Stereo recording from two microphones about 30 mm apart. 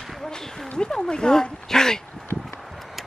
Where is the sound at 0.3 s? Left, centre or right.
Centre.